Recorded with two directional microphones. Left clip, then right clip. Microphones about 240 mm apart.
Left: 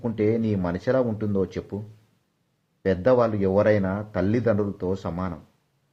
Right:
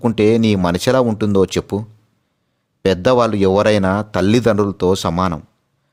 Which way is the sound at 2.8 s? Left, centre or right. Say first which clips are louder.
Right 6 dB; right.